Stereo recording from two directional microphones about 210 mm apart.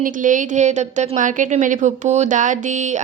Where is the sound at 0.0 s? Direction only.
35° right (ahead or behind).